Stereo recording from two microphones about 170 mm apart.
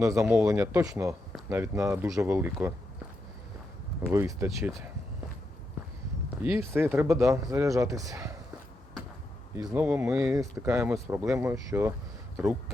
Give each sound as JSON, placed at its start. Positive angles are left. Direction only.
{"t": 0.0, "sound": "speech", "side_deg": -20}
{"t": 4.1, "sound": "speech", "side_deg": -15}
{"t": 6.6, "sound": "a man's voice", "side_deg": -15}
{"t": 9.6, "sound": "a man's voice", "side_deg": -25}